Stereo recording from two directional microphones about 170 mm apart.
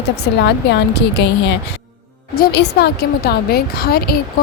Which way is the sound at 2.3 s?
75° left (ahead or behind).